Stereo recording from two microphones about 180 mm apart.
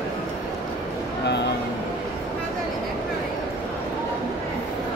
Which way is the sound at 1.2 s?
70° left (ahead or behind).